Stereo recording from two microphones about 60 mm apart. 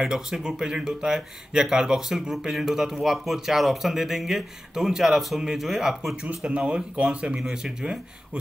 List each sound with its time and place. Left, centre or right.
0.0 s speech: centre
6.2 s speech: centre